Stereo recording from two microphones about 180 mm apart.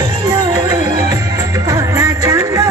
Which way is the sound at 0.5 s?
20° right (ahead or behind).